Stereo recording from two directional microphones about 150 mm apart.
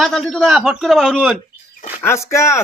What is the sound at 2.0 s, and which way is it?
Speech, 20° left (ahead or behind).